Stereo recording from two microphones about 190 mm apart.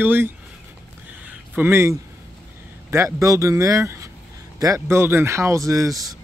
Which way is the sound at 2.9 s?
15° right (ahead or behind).